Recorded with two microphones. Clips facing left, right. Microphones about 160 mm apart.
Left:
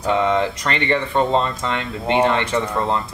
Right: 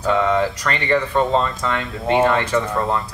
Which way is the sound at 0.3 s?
25° left (ahead or behind).